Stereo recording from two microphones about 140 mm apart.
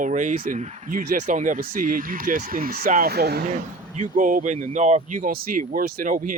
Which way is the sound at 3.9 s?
65° right (ahead or behind).